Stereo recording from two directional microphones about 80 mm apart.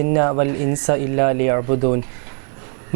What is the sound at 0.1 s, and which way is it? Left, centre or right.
Speech, centre.